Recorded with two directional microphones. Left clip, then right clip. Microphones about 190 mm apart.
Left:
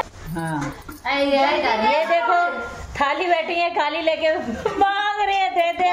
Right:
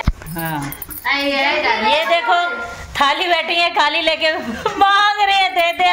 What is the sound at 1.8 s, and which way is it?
A woman's voice, centre (ahead or behind).